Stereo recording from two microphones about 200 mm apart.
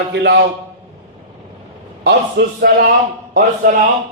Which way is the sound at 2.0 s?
55° right (ahead or behind).